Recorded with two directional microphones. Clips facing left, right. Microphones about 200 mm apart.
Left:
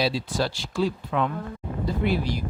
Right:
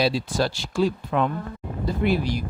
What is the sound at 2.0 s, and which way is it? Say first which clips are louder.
Speech: right 3 dB; 60° right (ahead or behind).